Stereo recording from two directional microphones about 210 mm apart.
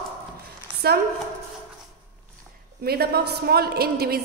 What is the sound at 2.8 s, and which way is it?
A woman's voice, 50° right (ahead or behind).